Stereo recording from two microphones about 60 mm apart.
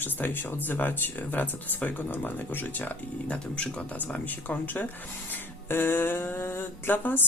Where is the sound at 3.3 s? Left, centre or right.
Centre.